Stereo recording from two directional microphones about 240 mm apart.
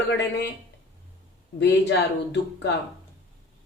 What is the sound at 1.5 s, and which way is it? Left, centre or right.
Speech, left.